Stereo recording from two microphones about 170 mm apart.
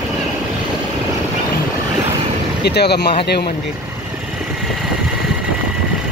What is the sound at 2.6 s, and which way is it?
Speech, 75° left (ahead or behind).